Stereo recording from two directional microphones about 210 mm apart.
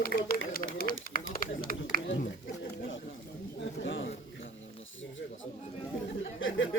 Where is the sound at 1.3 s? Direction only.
45° left (ahead or behind).